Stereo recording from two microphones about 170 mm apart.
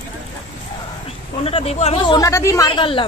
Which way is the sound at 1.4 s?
35° left (ahead or behind).